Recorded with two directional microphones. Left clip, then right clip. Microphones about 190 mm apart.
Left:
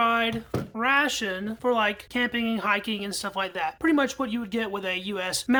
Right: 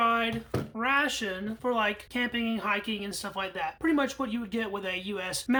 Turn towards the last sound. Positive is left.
turn(degrees=25)  # may be behind; listen again after turning